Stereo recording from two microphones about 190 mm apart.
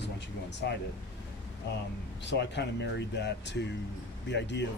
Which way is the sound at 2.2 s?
65° left (ahead or behind).